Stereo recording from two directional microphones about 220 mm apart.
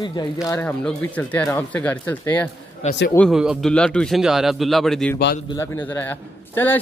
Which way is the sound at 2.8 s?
30° left (ahead or behind).